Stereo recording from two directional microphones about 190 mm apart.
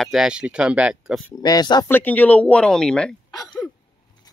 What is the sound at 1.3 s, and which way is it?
Speech, 20° left (ahead or behind).